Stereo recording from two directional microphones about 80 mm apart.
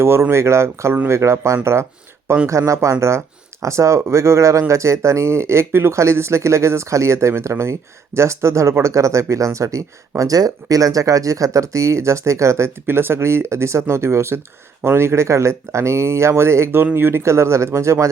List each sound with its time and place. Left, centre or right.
0.0 s speech: right